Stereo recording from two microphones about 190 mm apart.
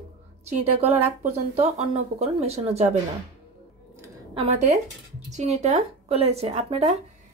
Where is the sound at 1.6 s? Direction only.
35° right (ahead or behind).